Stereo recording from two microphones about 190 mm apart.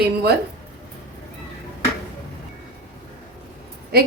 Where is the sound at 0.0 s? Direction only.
55° right (ahead or behind).